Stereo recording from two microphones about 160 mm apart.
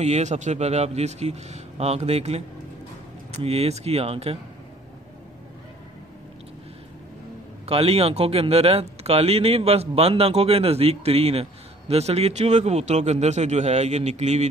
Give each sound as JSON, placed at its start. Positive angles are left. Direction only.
{"t": 0.0, "sound": "a man's voice", "side_deg": -45}
{"t": 7.6, "sound": "a man's voice", "side_deg": -40}